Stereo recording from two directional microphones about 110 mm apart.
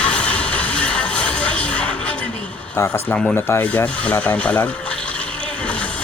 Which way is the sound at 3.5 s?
25° left (ahead or behind).